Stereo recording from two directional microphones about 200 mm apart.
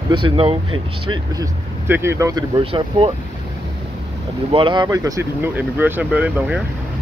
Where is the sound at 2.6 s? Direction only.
25° right (ahead or behind).